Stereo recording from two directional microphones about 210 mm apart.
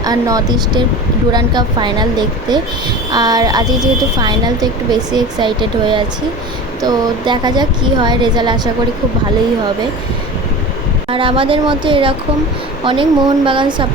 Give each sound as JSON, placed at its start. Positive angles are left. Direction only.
{"t": 0.0, "sound": "speech", "side_deg": -15}
{"t": 11.1, "sound": "speech", "side_deg": -25}